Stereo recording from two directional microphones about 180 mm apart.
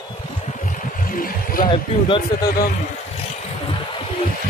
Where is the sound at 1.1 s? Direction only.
50° left (ahead or behind).